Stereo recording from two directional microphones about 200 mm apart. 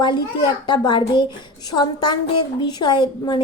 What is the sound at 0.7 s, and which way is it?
A woman's voice, 20° left (ahead or behind).